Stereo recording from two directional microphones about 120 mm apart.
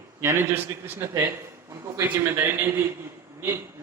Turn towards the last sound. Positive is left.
turn(degrees=-20)  # may be behind; listen again after turning